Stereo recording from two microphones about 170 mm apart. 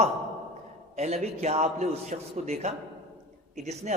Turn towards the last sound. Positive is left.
turn(degrees=-40)  # may be behind; listen again after turning